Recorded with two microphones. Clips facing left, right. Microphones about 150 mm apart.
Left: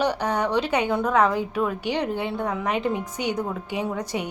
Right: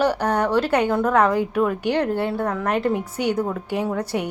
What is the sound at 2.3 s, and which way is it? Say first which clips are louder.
A woman's voice: right 3 dB; centre (ahead or behind).